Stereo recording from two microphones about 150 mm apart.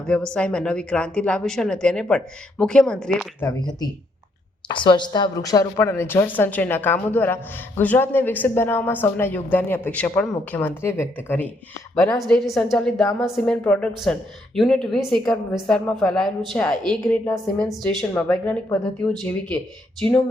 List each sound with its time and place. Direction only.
0.3 s a woman's voice: 5° left (ahead or behind)
3.4 s a woman's voice: 30° left (ahead or behind); by 11.4 s 15° left (ahead or behind)
12.2 s a woman's voice: centre (ahead or behind)